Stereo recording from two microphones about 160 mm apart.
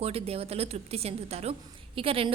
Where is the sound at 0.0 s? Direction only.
40° right (ahead or behind).